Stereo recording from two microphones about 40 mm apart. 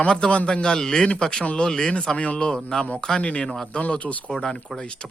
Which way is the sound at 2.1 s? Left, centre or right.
Left.